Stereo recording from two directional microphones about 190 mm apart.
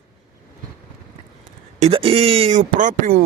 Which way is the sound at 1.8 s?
30° right (ahead or behind).